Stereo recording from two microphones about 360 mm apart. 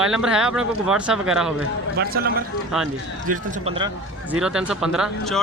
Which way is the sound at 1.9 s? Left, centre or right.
Right.